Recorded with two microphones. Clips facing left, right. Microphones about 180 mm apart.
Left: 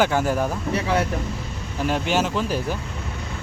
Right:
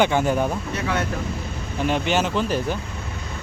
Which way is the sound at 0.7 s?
30° left (ahead or behind).